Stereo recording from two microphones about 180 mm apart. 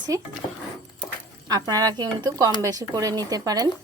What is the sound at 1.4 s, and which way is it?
Speech, 20° right (ahead or behind).